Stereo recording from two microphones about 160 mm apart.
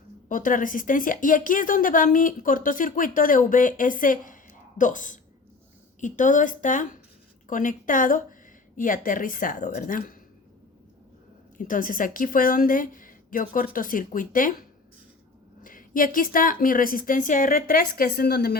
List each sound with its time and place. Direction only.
0.3 s a woman's voice: 55° left (ahead or behind)
11.5 s a woman's voice: 55° left (ahead or behind)
15.6 s a woman's voice: 60° left (ahead or behind); by 18.5 s 75° left (ahead or behind)